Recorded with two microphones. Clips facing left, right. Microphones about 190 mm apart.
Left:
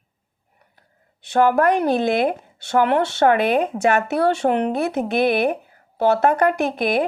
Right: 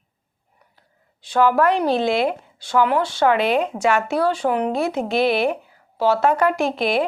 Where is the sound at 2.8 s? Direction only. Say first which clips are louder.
Left 1 dB; 60° left (ahead or behind); by 4.0 s 45° left (ahead or behind).